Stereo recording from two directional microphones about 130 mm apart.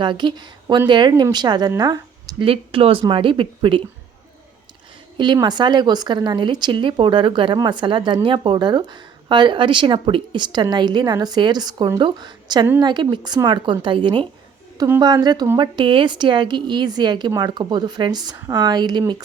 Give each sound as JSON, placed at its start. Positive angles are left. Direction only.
{"t": 0.0, "sound": "speech", "side_deg": -35}
{"t": 5.1, "sound": "speech", "side_deg": -35}